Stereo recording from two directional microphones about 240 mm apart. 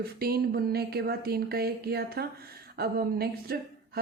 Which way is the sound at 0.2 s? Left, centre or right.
Right.